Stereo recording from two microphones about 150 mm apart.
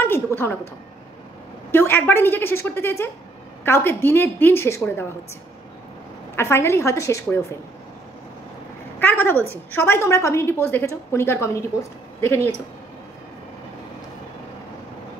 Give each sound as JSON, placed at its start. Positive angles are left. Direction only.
{"t": 0.0, "sound": "a woman's voice", "side_deg": 15}
{"t": 1.7, "sound": "a woman's voice", "side_deg": 15}
{"t": 6.3, "sound": "a woman's voice", "side_deg": 15}
{"t": 9.0, "sound": "a woman's voice", "side_deg": 15}